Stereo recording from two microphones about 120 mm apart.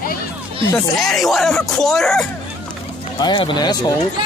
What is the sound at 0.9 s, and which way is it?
Speech, centre (ahead or behind).